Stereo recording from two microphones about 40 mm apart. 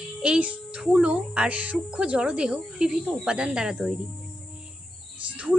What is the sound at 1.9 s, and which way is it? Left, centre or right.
Speech, right.